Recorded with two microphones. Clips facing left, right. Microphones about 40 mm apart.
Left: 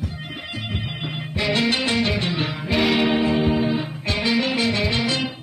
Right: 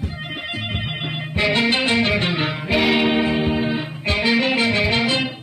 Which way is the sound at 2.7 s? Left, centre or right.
Centre.